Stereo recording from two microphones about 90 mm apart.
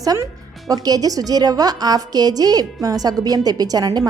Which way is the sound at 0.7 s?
45° right (ahead or behind).